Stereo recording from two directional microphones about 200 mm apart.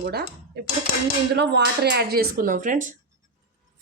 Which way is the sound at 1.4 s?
55° right (ahead or behind).